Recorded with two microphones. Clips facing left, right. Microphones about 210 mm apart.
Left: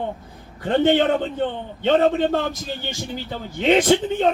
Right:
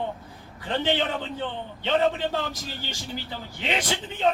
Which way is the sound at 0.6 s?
50° left (ahead or behind).